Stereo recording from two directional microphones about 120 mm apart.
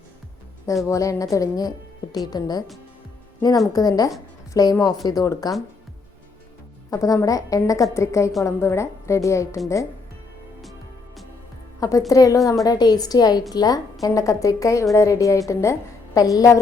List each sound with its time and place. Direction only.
0.9 s a woman's voice: 25° left (ahead or behind)
3.7 s a woman's voice: 30° left (ahead or behind)
6.9 s a woman's voice: 30° left (ahead or behind)
11.8 s a woman's voice: 30° left (ahead or behind)